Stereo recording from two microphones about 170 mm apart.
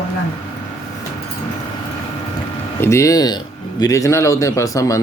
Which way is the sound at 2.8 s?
15° left (ahead or behind).